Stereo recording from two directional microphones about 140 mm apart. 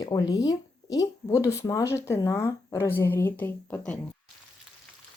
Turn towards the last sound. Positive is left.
turn(degrees=10)  # may be behind; listen again after turning